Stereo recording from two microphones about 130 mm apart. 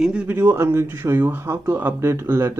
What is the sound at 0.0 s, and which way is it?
Speech, 10° right (ahead or behind).